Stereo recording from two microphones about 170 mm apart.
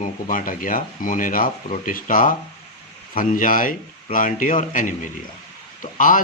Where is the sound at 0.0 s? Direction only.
50° left (ahead or behind).